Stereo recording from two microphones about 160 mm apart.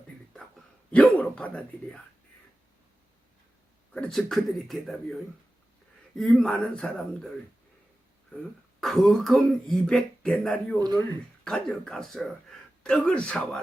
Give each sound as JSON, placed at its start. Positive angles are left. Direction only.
{"t": 0.9, "sound": "speech", "side_deg": 10}
{"t": 3.9, "sound": "speech", "side_deg": 5}
{"t": 8.8, "sound": "speech", "side_deg": 0}
{"t": 10.8, "sound": "speech", "side_deg": -25}
{"t": 11.4, "sound": "speech", "side_deg": 5}